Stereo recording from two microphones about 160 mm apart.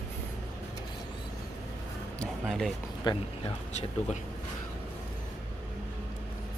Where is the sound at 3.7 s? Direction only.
45° left (ahead or behind).